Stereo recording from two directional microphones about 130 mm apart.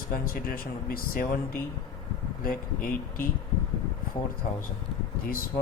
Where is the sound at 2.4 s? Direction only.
90° left.